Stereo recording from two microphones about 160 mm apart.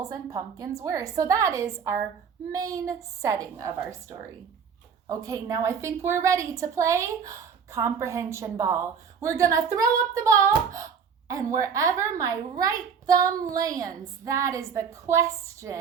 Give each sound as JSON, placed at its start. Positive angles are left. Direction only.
{"t": 0.0, "sound": "a woman's voice", "side_deg": -20}
{"t": 5.0, "sound": "a woman's voice", "side_deg": -20}